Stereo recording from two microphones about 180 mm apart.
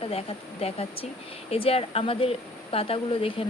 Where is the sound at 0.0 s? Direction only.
35° left (ahead or behind).